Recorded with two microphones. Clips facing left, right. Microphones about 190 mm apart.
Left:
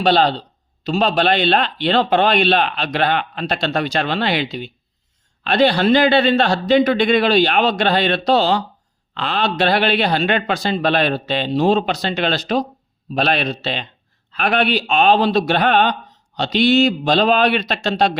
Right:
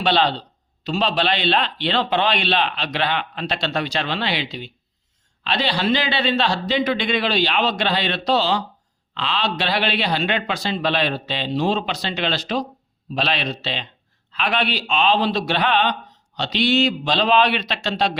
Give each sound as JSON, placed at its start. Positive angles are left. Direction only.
{"t": 0.0, "sound": "a man's voice", "side_deg": 40}